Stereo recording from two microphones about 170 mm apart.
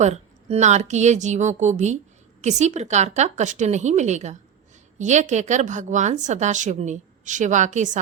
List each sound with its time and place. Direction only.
0.0 s a woman's voice: 40° right (ahead or behind)